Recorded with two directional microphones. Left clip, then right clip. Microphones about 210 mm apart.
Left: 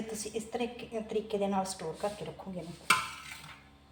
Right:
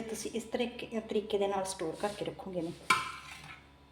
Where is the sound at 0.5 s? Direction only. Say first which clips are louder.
Right 1 dB; 55° right (ahead or behind).